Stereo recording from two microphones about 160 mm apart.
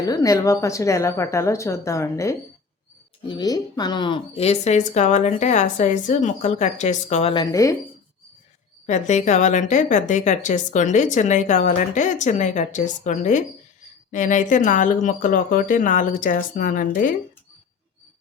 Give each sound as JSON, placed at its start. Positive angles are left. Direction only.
{"t": 0.0, "sound": "a woman's voice", "side_deg": 20}
{"t": 7.3, "sound": "a woman's voice", "side_deg": 20}
{"t": 8.9, "sound": "a woman's voice", "side_deg": 50}